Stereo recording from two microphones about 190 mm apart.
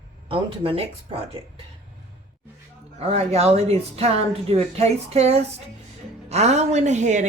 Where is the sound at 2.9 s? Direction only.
35° right (ahead or behind).